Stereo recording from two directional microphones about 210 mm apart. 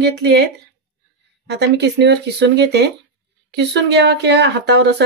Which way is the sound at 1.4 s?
55° right (ahead or behind).